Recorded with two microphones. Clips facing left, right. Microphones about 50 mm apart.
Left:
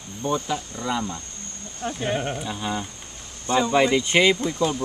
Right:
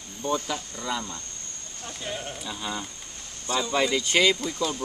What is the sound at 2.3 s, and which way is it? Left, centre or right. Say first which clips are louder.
Speech: left 5 dB; centre.